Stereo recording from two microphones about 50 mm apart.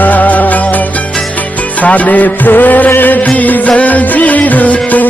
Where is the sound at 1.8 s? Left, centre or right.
Left.